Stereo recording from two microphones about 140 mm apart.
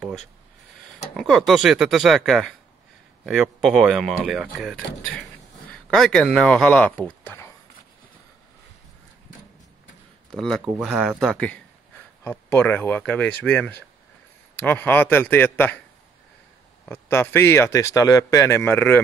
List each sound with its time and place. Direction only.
0.0 s a sound: centre (ahead or behind)
0.9 s speech: centre (ahead or behind); by 7.5 s 15° left (ahead or behind)
10.3 s speech: centre (ahead or behind)
16.8 s speech: 15° left (ahead or behind)